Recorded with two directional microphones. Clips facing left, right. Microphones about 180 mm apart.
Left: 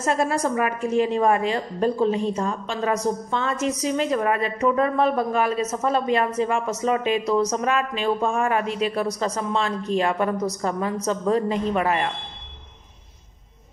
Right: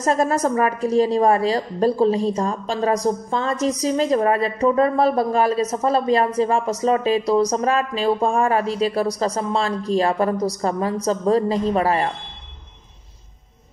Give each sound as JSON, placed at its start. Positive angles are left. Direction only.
{"t": 0.0, "sound": "a woman's voice", "side_deg": -40}